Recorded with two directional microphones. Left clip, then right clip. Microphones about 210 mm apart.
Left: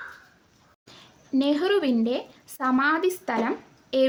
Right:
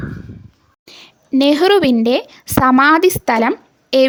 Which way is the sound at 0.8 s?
40° right (ahead or behind).